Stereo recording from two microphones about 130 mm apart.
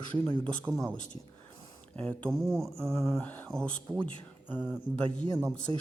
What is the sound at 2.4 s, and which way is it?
Mantra, 20° right (ahead or behind).